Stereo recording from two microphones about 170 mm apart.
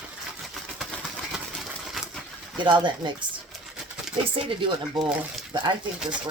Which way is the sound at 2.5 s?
30° right (ahead or behind).